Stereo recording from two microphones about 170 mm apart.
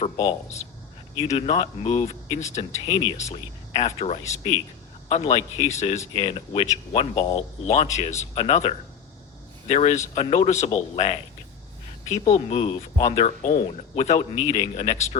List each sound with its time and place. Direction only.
0.0 s speech: 40° left (ahead or behind)